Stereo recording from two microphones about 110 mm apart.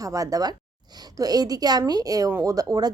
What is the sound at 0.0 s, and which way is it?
Speech, 30° right (ahead or behind).